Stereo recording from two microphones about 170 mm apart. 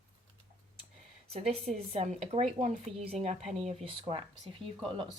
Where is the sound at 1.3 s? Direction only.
35° right (ahead or behind).